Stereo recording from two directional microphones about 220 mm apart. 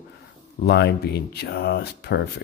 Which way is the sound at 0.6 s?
45° left (ahead or behind).